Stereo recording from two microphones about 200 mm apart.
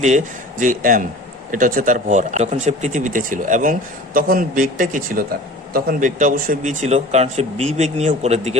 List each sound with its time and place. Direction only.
0.6 s speech: 40° right (ahead or behind)